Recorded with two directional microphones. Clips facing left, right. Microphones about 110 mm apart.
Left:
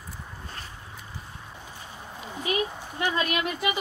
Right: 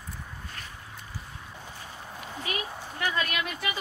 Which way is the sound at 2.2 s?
20° left (ahead or behind).